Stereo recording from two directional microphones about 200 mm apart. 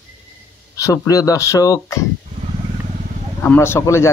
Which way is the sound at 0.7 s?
15° left (ahead or behind).